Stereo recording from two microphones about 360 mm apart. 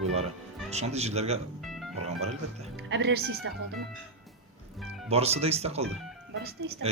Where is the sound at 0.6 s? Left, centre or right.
Centre.